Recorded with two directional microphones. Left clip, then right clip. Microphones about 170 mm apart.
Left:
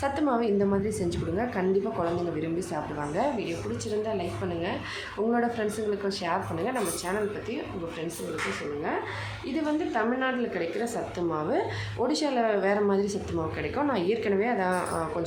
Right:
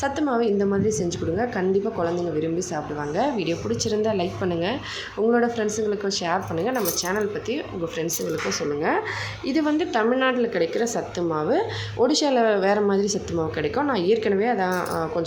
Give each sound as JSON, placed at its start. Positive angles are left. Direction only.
{"t": 0.0, "sound": "a woman's voice", "side_deg": -15}
{"t": 4.0, "sound": "a woman's voice", "side_deg": -35}
{"t": 5.3, "sound": "a woman's voice", "side_deg": -20}
{"t": 9.5, "sound": "a woman's voice", "side_deg": -25}